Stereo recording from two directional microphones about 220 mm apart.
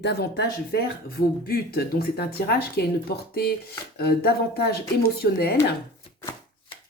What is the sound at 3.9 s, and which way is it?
Speech, 45° left (ahead or behind).